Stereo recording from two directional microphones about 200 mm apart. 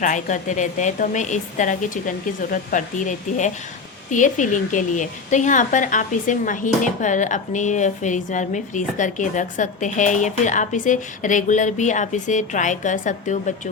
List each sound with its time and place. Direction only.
0.0 s a woman's voice: 40° left (ahead or behind)